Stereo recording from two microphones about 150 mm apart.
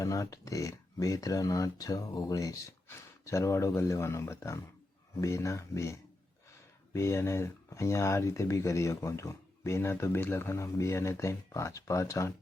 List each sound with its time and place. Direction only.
0.0 s speech: 20° left (ahead or behind)